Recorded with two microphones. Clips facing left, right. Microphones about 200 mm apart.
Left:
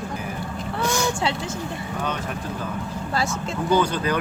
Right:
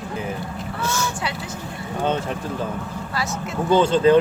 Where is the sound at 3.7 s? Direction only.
25° right (ahead or behind).